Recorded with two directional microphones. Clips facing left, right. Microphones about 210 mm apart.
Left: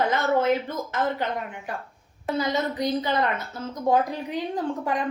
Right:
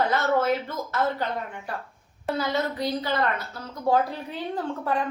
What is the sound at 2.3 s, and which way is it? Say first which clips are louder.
A woman's voice: left 2 dB; 20° left (ahead or behind).